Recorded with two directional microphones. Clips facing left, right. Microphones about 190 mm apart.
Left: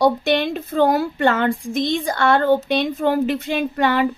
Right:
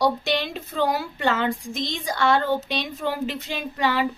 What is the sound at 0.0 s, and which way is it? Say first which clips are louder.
A woman's voice: left 6 dB; 50° left (ahead or behind).